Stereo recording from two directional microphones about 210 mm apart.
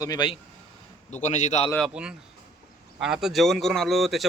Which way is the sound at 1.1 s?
35° left (ahead or behind).